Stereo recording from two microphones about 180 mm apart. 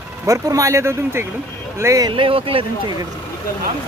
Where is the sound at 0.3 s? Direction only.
20° right (ahead or behind).